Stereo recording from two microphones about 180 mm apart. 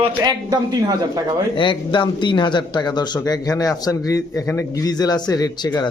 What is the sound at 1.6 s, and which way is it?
Speech, 25° left (ahead or behind).